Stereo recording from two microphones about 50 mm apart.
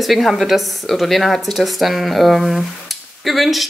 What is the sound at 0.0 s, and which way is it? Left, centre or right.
Speech, centre.